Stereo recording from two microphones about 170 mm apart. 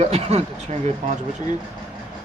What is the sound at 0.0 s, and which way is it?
Speech, 40° right (ahead or behind).